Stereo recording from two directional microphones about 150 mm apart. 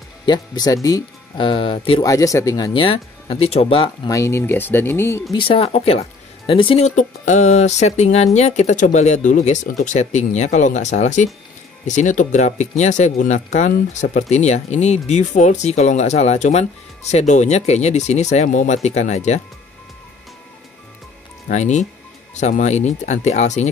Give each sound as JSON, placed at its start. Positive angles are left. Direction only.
{"t": 0.2, "sound": "speech", "side_deg": 30}
{"t": 2.0, "sound": "speech", "side_deg": 20}
{"t": 4.1, "sound": "speech", "side_deg": 20}
{"t": 5.3, "sound": "speech", "side_deg": 35}
{"t": 7.0, "sound": "speech", "side_deg": 55}
{"t": 21.5, "sound": "speech", "side_deg": 50}